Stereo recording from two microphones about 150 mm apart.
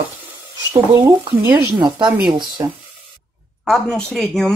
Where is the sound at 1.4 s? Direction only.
10° right (ahead or behind).